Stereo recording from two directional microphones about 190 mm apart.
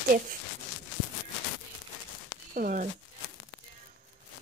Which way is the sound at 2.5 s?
45° right (ahead or behind).